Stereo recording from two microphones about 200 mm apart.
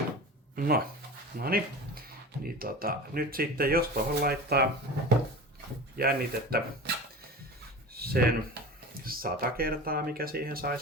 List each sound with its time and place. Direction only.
0.5 s speech: 45° right (ahead or behind)
7.9 s a sound: 50° right (ahead or behind)
9.0 s speech: 45° right (ahead or behind)